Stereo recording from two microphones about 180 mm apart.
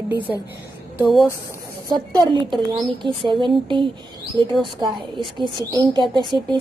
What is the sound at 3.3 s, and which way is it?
Speech, 25° right (ahead or behind).